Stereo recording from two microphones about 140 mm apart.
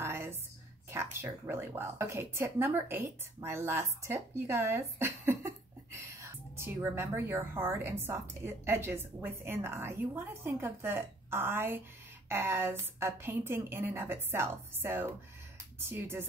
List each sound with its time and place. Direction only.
0.0 s a sound: 20° right (ahead or behind)
0.9 s a woman's voice: 20° right (ahead or behind)
6.6 s a woman's voice: 15° right (ahead or behind)